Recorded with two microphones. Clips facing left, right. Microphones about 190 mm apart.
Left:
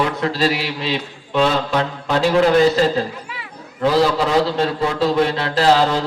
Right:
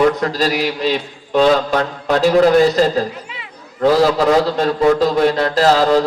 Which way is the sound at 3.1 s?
20° right (ahead or behind).